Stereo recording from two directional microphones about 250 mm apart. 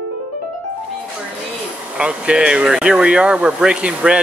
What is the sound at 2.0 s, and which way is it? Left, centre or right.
Speech, centre.